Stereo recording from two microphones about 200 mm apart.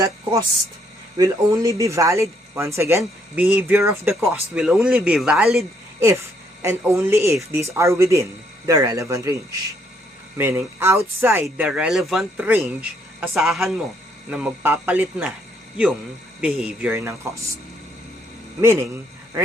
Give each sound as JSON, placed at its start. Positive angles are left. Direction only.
{"t": 0.0, "sound": "speech", "side_deg": -15}
{"t": 6.6, "sound": "speech", "side_deg": -15}
{"t": 10.3, "sound": "speech", "side_deg": -10}
{"t": 16.4, "sound": "speech", "side_deg": -5}
{"t": 18.6, "sound": "speech", "side_deg": -10}